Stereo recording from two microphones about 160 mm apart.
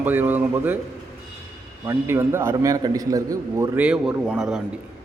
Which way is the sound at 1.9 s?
15° right (ahead or behind).